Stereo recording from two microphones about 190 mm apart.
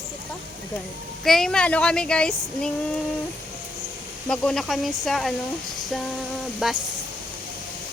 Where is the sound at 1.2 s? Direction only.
Centre (ahead or behind).